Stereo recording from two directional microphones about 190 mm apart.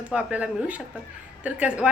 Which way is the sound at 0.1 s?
5° right (ahead or behind).